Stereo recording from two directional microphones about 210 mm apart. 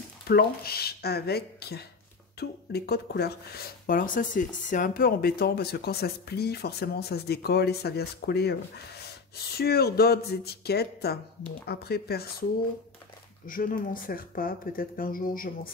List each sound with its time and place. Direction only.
0.3 s speech: 45° left (ahead or behind)
9.6 s speech: 45° left (ahead or behind)
13.5 s speech: 40° left (ahead or behind)